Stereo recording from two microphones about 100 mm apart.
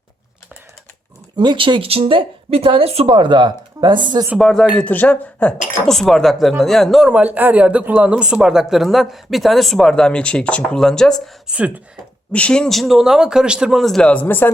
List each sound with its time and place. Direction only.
1.4 s speech: 55° right (ahead or behind); by 3.2 s 85° right
3.2 s speech: 50° right (ahead or behind)
4.4 s speech: centre (ahead or behind)
4.9 s speech: 15° left (ahead or behind)
7.1 s speech: 15° right (ahead or behind); by 11.2 s 5° left (ahead or behind)
11.4 s speech: 10° right (ahead or behind)
12.3 s speech: 10° left (ahead or behind)